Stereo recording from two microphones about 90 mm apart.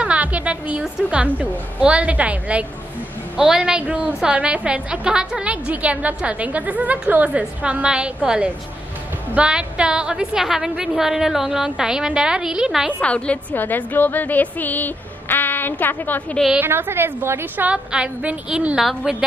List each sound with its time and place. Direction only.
0.0 s a woman's voice: 15° right (ahead or behind)
13.0 s a woman's voice: 15° left (ahead or behind)
16.5 s a woman's voice: 25° right (ahead or behind)
17.6 s a woman's voice: 15° right (ahead or behind)
18.8 s a woman's voice: 5° right (ahead or behind)